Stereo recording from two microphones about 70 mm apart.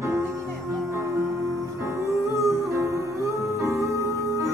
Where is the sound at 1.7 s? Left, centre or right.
Right.